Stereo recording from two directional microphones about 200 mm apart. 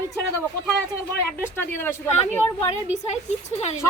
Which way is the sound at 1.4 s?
10° left (ahead or behind).